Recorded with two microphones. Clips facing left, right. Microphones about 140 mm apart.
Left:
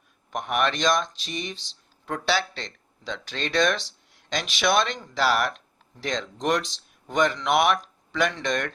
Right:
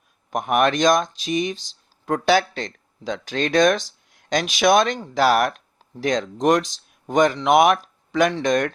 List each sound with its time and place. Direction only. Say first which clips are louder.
0.3 s speech: right 6 dB; 45° right (ahead or behind)